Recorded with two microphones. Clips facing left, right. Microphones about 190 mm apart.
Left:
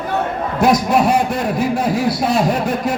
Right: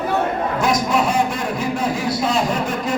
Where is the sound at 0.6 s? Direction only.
60° left (ahead or behind).